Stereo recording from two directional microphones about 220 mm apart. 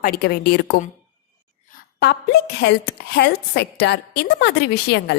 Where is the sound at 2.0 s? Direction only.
50° left (ahead or behind).